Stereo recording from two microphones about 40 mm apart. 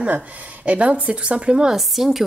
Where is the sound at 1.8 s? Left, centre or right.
Centre.